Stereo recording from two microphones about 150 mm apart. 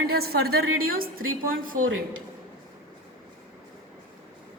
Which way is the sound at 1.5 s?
70° right (ahead or behind).